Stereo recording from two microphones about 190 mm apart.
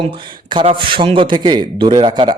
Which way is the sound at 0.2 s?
25° right (ahead or behind).